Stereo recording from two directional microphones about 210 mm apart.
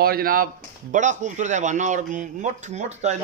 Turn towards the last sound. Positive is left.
turn(degrees=-35)  # may be behind; listen again after turning